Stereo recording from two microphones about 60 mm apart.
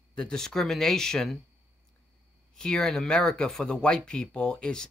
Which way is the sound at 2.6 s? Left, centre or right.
Centre.